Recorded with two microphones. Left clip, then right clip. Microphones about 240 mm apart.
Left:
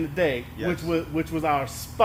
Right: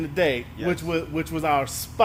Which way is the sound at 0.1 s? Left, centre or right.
Right.